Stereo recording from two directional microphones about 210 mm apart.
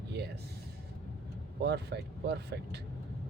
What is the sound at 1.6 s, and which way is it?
A man's voice, 50° right (ahead or behind).